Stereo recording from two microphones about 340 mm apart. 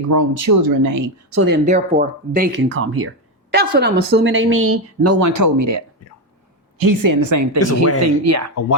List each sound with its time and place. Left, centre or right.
0.1 s speech: right
1.6 s speech: centre; by 5.8 s right
6.7 s speech: right
7.6 s speech: left
8.0 s speech: right